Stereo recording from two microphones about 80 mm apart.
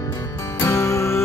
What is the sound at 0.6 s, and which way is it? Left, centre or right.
Music, left.